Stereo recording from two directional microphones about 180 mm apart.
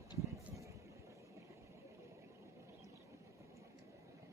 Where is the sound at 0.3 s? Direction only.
15° right (ahead or behind).